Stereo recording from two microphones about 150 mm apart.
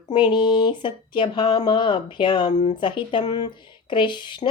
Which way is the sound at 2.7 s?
30° left (ahead or behind).